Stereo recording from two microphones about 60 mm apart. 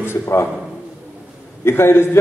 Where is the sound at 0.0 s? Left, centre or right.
Left.